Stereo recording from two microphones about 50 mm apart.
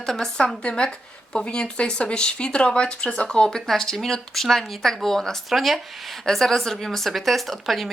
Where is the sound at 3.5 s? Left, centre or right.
Centre.